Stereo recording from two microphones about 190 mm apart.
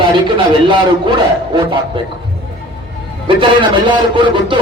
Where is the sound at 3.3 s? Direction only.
25° right (ahead or behind).